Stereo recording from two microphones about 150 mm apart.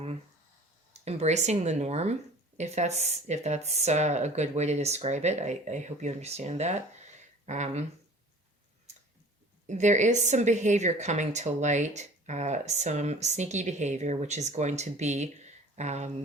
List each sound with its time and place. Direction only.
1.0 s a woman's voice: 50° right (ahead or behind)
9.6 s a woman's voice: 50° right (ahead or behind)